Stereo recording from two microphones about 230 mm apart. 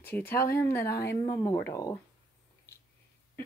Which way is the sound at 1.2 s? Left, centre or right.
Centre.